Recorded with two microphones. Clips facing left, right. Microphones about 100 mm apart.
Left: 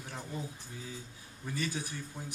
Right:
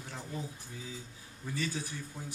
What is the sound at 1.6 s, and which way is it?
Speech, 15° left (ahead or behind).